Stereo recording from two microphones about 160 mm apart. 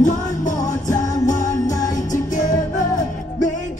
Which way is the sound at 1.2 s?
50° left (ahead or behind).